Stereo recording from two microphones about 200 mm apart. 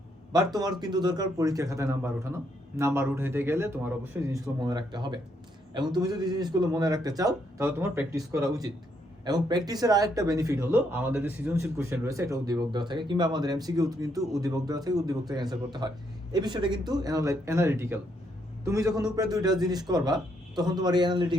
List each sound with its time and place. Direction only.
0.3 s speech: 20° right (ahead or behind)